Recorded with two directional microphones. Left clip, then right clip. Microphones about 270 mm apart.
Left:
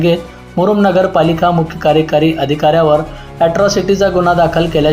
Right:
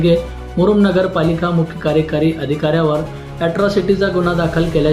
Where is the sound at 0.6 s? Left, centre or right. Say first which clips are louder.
Left 3 dB; centre.